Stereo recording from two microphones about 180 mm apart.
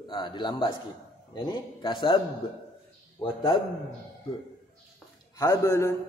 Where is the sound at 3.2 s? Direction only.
25° left (ahead or behind).